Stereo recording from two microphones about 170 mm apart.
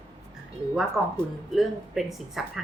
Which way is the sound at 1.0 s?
Centre (ahead or behind).